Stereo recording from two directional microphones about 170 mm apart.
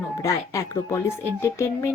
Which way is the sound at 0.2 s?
20° left (ahead or behind).